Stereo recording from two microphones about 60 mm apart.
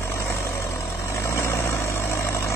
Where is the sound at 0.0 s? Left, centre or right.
Left.